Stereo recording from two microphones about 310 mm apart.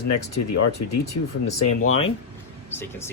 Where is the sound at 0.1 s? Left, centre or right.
Left.